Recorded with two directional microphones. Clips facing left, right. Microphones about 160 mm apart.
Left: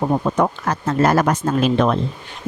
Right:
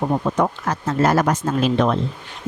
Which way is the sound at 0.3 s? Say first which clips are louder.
Left 2 dB; 55° left (ahead or behind).